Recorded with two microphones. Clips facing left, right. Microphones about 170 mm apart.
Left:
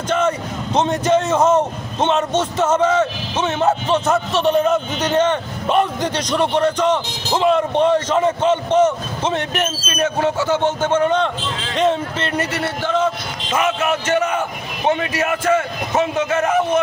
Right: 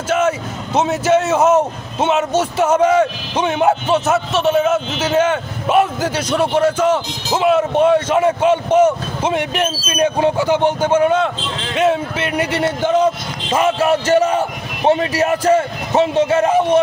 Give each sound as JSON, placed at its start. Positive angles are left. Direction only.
{"t": 0.7, "sound": "a man's voice", "side_deg": -5}
{"t": 13.0, "sound": "a man's voice", "side_deg": -30}